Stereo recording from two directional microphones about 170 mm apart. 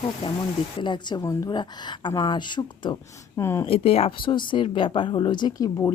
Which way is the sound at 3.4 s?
15° left (ahead or behind).